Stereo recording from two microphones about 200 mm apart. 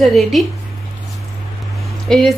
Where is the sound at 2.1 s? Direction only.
Centre (ahead or behind).